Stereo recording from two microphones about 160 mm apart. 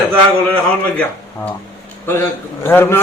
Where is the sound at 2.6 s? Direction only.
15° left (ahead or behind).